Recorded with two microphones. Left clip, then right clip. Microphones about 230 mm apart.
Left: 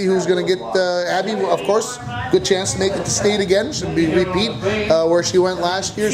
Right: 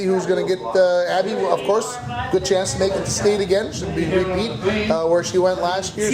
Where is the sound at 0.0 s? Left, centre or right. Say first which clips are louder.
Left 2 dB; left.